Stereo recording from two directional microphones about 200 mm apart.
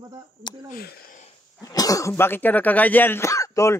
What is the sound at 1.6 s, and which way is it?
Speech, 15° left (ahead or behind).